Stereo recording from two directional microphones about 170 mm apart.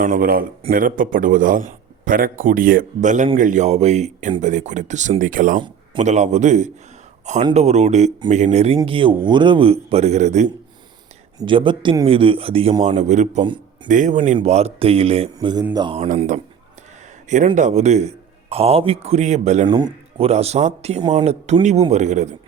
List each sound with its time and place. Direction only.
0.0 s a man's voice: 55° right (ahead or behind)
5.5 s a sound: 25° right (ahead or behind)
6.0 s a man's voice: 45° right (ahead or behind)
9.9 s a man's voice: 40° right (ahead or behind)
11.3 s a man's voice: 30° right (ahead or behind); by 14.2 s 50° right (ahead or behind)
14.3 s a man's voice: 40° right (ahead or behind)
16.0 s a man's voice: 45° right (ahead or behind)
19.6 s speech: 25° right (ahead or behind)
20.2 s a man's voice: 40° right (ahead or behind)